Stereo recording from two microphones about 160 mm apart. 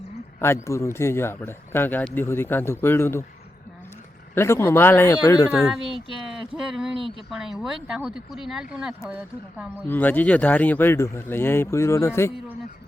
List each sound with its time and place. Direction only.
0.3 s speech: 15° left (ahead or behind)
4.4 s speech: 15° left (ahead or behind)
5.5 s speech: centre (ahead or behind)
9.8 s speech: 10° left (ahead or behind)